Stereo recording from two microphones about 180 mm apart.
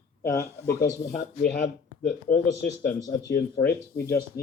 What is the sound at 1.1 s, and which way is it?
Speech, 60° left (ahead or behind).